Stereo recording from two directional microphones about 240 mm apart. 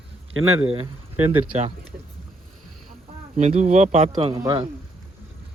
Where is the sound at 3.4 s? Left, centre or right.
Right.